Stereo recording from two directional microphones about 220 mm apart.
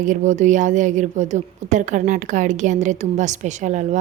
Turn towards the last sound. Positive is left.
turn(degrees=-35)  # may be behind; listen again after turning